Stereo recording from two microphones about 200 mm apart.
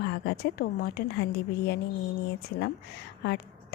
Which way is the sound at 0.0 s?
55° left (ahead or behind).